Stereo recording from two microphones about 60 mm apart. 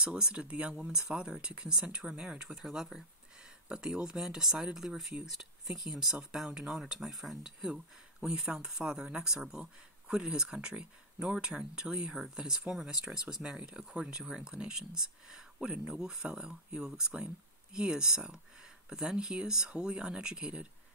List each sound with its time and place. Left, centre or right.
0.0 s speech: centre